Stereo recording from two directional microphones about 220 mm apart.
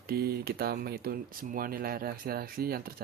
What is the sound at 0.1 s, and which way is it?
Speech, 45° right (ahead or behind).